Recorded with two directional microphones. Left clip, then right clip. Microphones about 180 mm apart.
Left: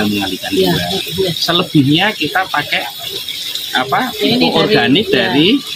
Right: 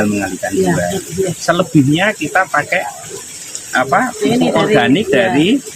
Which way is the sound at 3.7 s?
15° right (ahead or behind).